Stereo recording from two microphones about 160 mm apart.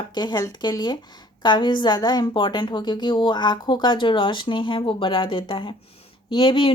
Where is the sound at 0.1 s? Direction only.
25° left (ahead or behind).